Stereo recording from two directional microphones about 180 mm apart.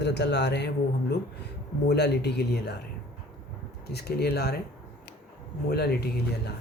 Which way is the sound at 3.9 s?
65° left (ahead or behind).